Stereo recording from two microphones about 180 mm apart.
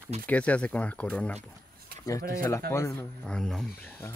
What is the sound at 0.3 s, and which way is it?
Speech, 5° left (ahead or behind).